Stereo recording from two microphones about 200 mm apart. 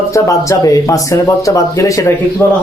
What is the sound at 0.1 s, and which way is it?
A man's voice, 15° left (ahead or behind).